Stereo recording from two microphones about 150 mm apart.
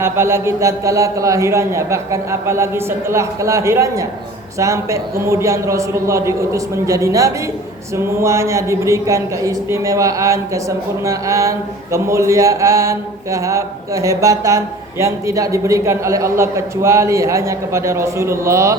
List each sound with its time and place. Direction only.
0.0 s a woman's voice: 15° right (ahead or behind)